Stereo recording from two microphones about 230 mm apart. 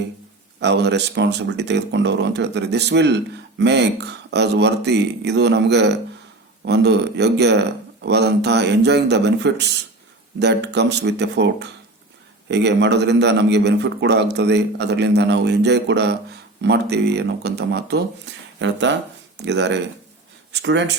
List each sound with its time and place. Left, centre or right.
0.6 s a man's voice: right